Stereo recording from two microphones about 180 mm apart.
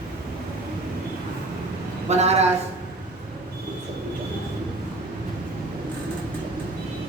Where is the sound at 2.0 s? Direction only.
35° right (ahead or behind).